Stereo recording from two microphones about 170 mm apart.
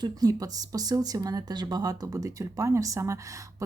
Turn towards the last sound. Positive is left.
turn(degrees=-20)  # may be behind; listen again after turning